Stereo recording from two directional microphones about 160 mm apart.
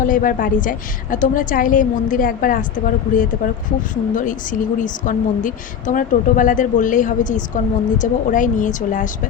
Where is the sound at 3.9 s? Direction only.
55° left (ahead or behind).